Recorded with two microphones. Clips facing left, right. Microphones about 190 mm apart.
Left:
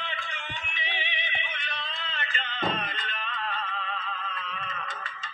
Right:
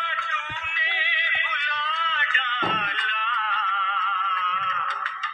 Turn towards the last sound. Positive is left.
turn(degrees=45)  # may be behind; listen again after turning